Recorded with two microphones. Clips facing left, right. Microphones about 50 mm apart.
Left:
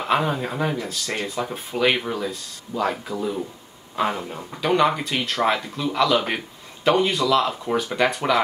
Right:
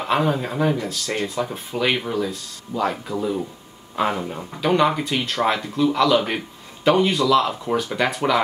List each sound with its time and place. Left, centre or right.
0.0 s speech: centre